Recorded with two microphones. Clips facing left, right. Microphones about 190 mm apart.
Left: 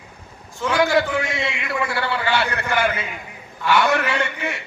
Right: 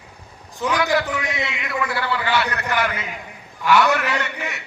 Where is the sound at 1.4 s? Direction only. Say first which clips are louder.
Left 1 dB; 30° left (ahead or behind).